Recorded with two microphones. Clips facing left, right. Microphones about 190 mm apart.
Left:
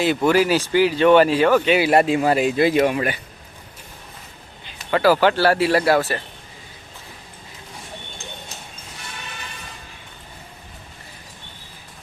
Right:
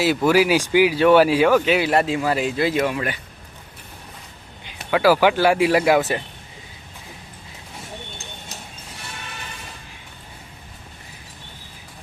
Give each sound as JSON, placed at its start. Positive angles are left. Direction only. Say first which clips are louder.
{"t": 0.0, "sound": "speech", "louder": "even", "side_deg": -5}
{"t": 1.8, "sound": "speech", "louder": "left 3 dB", "side_deg": 15}
{"t": 4.9, "sound": "speech", "louder": "even", "side_deg": -10}